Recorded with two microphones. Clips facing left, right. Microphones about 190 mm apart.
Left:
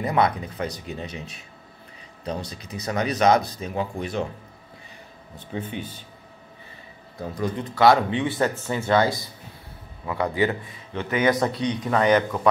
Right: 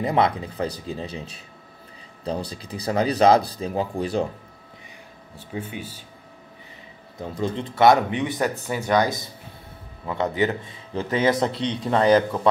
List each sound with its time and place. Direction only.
0.0 s speech: 25° right (ahead or behind)
5.3 s speech: 10° right (ahead or behind)
7.2 s speech: 25° right (ahead or behind)
10.9 s speech: 30° right (ahead or behind)